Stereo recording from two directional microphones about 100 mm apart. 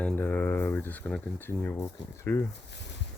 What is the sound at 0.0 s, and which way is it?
Speech, 15° left (ahead or behind).